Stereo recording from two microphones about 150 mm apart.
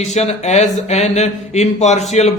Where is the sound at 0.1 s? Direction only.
50° left (ahead or behind).